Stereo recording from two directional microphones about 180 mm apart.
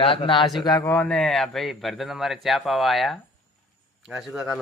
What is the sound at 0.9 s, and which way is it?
A man's voice, 5° left (ahead or behind).